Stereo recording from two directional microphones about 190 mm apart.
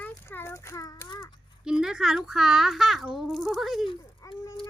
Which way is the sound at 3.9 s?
20° left (ahead or behind).